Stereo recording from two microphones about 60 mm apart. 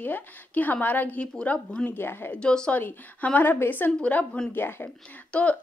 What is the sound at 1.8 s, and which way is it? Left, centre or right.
Speech, left.